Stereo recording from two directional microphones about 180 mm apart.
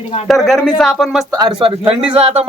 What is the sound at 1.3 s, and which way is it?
Speech, 20° right (ahead or behind).